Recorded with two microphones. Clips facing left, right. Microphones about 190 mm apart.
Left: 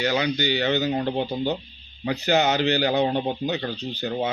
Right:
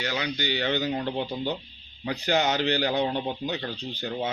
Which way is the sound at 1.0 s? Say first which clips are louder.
Left 4 dB; 35° left (ahead or behind).